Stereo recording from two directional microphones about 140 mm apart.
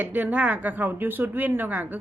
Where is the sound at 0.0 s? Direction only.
10° right (ahead or behind).